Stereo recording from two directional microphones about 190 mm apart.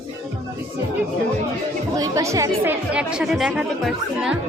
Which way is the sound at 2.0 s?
15° right (ahead or behind).